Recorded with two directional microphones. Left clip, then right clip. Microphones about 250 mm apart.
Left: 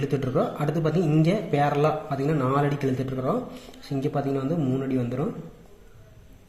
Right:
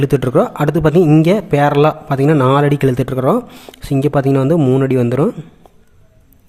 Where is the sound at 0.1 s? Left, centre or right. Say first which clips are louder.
Right 12 dB; right.